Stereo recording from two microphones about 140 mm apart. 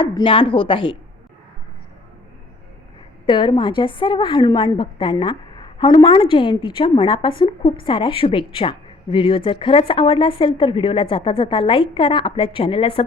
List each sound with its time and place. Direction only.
0.0 s a woman's voice: 35° left (ahead or behind)
3.2 s a woman's voice: 35° left (ahead or behind)